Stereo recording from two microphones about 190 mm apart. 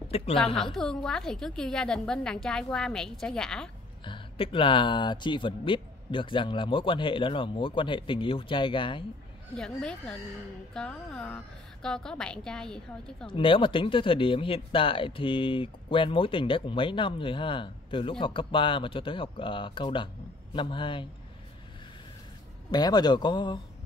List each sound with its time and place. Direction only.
0.6 s a woman's voice: centre (ahead or behind)
4.0 s speech: 25° left (ahead or behind)
9.6 s a woman's voice: 5° left (ahead or behind)
13.3 s speech: 25° left (ahead or behind)
22.7 s speech: 20° left (ahead or behind)